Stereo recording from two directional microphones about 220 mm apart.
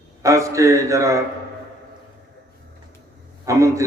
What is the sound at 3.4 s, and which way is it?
Speech, 15° right (ahead or behind).